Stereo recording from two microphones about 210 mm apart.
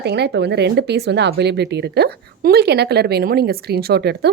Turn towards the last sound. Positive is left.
turn(degrees=-50)  # may be behind; listen again after turning